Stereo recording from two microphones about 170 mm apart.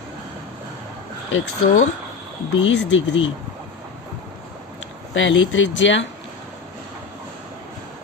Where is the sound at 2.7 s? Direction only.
90° left.